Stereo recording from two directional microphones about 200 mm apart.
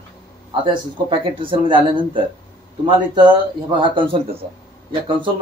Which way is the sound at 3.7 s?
25° right (ahead or behind).